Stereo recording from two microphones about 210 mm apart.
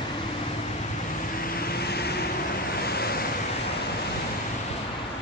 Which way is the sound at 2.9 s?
50° left (ahead or behind).